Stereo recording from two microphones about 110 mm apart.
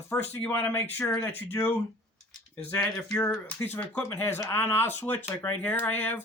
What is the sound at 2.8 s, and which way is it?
Speech, 5° left (ahead or behind).